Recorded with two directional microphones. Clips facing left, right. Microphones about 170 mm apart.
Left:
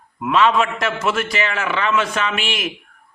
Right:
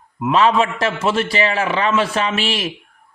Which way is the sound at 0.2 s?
35° right (ahead or behind).